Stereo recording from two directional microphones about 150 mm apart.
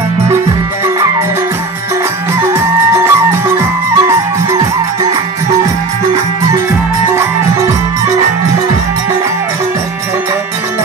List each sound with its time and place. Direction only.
2.5 s music: 20° right (ahead or behind)